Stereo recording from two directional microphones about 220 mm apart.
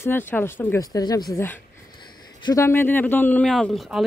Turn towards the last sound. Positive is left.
turn(degrees=0)  # may be behind; listen again after turning